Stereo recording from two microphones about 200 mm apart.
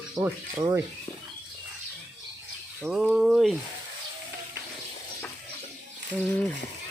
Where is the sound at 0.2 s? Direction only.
20° right (ahead or behind).